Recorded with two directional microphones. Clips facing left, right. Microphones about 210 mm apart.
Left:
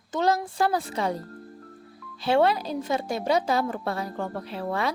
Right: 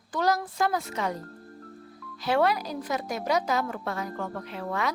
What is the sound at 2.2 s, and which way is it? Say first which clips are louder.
A woman's voice: left 3 dB; 25° left (ahead or behind).